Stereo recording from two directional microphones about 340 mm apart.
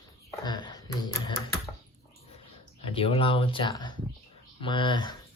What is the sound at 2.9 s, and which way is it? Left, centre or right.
Speech, centre.